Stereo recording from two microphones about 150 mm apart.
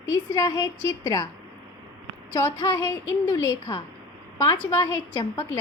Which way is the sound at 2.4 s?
20° left (ahead or behind).